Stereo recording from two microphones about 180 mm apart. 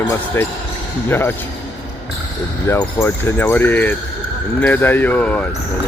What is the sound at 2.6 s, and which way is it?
Speech, 15° left (ahead or behind).